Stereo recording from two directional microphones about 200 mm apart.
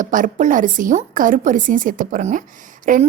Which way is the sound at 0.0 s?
40° right (ahead or behind).